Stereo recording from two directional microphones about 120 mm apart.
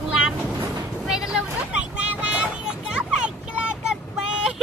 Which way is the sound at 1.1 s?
5° right (ahead or behind).